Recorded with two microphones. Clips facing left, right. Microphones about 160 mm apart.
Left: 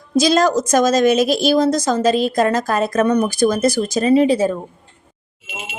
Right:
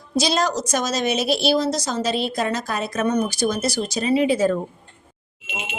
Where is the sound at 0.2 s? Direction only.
50° left (ahead or behind).